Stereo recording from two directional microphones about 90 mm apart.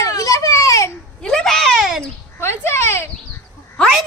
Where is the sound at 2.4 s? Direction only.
30° left (ahead or behind).